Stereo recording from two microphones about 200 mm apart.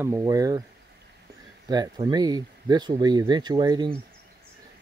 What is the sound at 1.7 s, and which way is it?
Speech, 20° right (ahead or behind).